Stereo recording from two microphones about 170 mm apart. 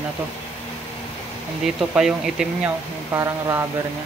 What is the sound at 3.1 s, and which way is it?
Speech, 15° right (ahead or behind).